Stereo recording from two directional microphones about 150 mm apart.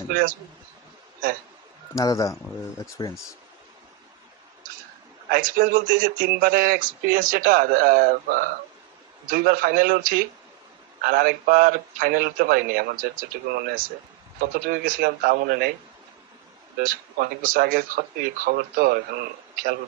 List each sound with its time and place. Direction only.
0.1 s speech: 70° right (ahead or behind)
2.0 s speech: 20° left (ahead or behind)
5.3 s speech: 70° right (ahead or behind)
14.4 s a man's voice: 75° right (ahead or behind)
16.7 s a man's voice: 70° right (ahead or behind)